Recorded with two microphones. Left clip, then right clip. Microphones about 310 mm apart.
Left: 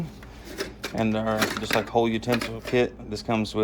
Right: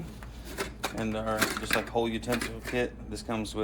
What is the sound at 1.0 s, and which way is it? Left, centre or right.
Speech, left.